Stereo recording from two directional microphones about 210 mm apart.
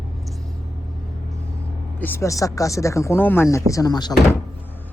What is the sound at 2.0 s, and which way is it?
Speech, 10° left (ahead or behind).